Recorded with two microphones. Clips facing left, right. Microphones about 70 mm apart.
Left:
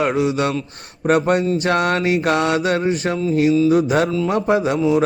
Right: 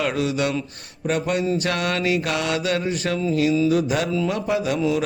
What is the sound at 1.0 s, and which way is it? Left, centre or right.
Speech, left.